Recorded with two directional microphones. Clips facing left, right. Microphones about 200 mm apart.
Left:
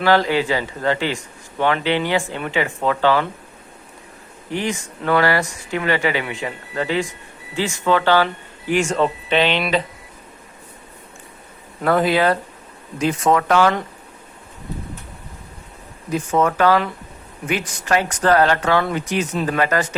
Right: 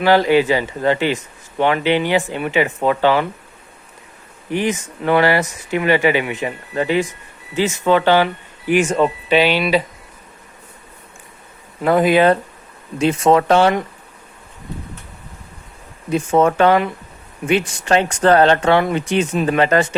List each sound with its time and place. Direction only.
0.0 s a man's voice: 15° right (ahead or behind)
4.5 s a man's voice: 20° right (ahead or behind)
11.9 s a man's voice: 15° right (ahead or behind)
16.1 s speech: 25° right (ahead or behind)